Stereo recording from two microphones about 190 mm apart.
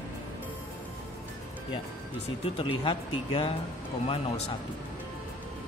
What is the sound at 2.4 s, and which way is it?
Speech, 30° left (ahead or behind).